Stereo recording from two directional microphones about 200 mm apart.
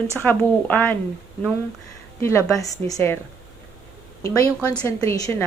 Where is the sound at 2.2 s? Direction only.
15° left (ahead or behind).